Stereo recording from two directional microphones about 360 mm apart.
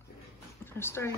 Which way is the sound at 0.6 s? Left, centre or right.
Centre.